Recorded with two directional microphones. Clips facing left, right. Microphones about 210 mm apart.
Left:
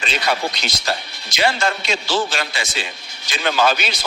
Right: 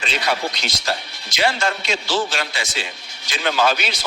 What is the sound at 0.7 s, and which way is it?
A man's voice, 55° left (ahead or behind).